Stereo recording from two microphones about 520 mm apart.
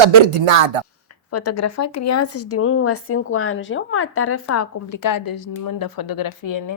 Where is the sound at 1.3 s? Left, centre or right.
Left.